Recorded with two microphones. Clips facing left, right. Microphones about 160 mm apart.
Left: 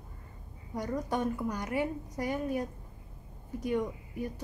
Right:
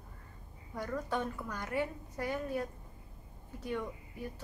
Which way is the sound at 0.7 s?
15° left (ahead or behind).